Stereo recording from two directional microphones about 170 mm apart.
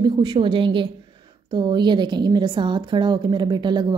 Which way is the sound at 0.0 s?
25° right (ahead or behind).